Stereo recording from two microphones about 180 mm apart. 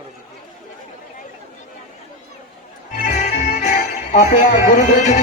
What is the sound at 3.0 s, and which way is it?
Music, 40° left (ahead or behind).